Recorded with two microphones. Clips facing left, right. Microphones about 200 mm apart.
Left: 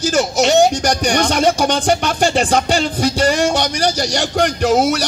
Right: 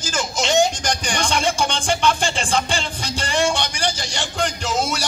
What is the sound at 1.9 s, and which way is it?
Speech, 40° left (ahead or behind).